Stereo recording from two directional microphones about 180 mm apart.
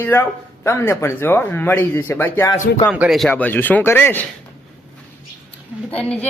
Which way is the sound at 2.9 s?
5° right (ahead or behind).